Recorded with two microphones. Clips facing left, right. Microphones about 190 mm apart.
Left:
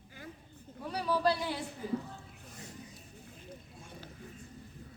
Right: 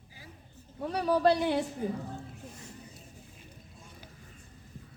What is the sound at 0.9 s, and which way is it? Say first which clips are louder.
Speech: right 5 dB; 60° right (ahead or behind).